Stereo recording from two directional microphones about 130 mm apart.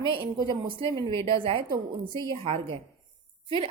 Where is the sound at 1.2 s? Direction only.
45° right (ahead or behind).